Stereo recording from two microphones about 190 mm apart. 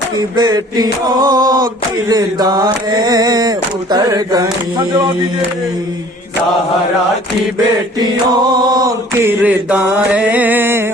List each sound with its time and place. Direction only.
0.3 s chant: 20° right (ahead or behind)
7.9 s mantra: 25° right (ahead or behind)